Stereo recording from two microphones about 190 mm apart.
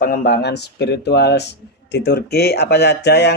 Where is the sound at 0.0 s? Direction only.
45° left (ahead or behind).